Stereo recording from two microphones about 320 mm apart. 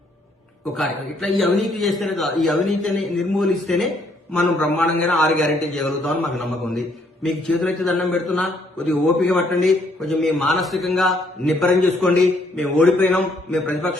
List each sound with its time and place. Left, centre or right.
0.7 s a man's voice: centre